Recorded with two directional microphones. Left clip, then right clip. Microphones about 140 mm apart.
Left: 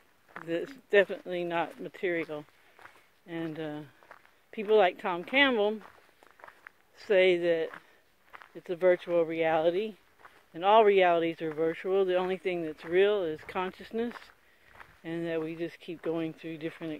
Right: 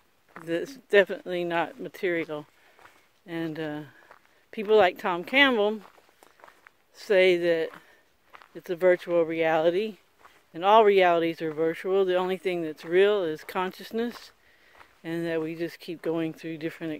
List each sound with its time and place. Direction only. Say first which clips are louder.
0.3 s a sound: right 1 dB; 5° right (ahead or behind)
0.8 s speech: right 4 dB; 40° right (ahead or behind)
7.0 s speech: right 3 dB; 35° right (ahead or behind)
10.5 s speech: right 3 dB; 35° right (ahead or behind)